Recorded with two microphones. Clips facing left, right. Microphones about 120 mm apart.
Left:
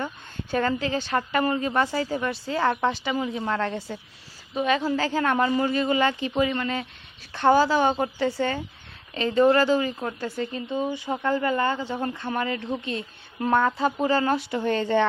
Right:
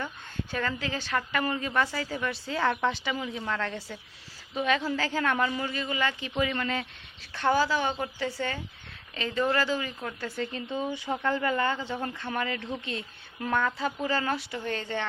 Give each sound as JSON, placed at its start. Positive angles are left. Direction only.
{"t": 0.5, "sound": "a woman's voice", "side_deg": 35}
{"t": 3.3, "sound": "a woman's voice", "side_deg": 30}
{"t": 5.5, "sound": "a woman's voice", "side_deg": 40}
{"t": 10.2, "sound": "a woman's voice", "side_deg": 15}